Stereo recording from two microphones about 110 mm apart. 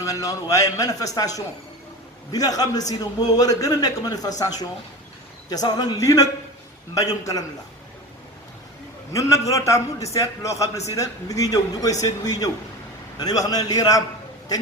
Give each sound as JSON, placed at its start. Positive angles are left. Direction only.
{"t": 0.0, "sound": "a man's voice", "side_deg": 30}
{"t": 9.1, "sound": "a man's voice", "side_deg": 30}